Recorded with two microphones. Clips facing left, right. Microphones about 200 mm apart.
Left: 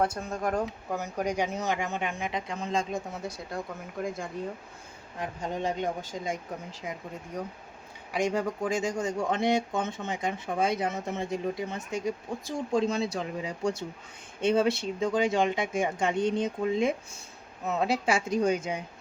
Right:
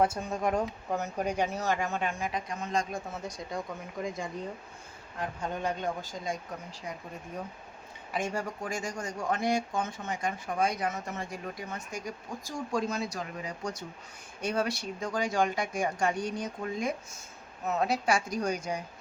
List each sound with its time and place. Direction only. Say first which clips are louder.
0.2 s speech: even; centre (ahead or behind)
0.9 s speech: left 1 dB; 10° left (ahead or behind)
3.2 s speech: left 1 dB; 5° left (ahead or behind)
5.2 s speech: left 2 dB; 20° left (ahead or behind)
8.1 s speech: left 5 dB; 15° left (ahead or behind)